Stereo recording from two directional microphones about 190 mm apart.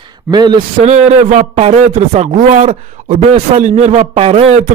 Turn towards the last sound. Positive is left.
turn(degrees=-30)  # may be behind; listen again after turning